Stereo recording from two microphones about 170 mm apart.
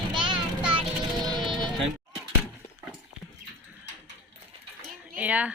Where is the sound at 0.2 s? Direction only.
30° right (ahead or behind).